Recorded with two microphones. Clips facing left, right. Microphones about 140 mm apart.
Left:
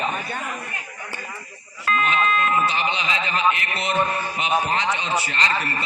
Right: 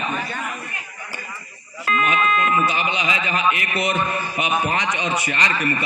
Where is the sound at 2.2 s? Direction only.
40° left (ahead or behind).